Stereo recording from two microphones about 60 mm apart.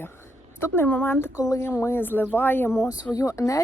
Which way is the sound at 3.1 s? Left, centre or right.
Left.